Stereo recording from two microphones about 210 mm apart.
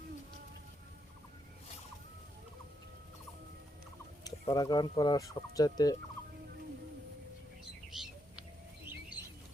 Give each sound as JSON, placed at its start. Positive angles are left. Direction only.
{"t": 4.2, "sound": "speech", "side_deg": 20}
{"t": 7.9, "sound": "bird", "side_deg": 0}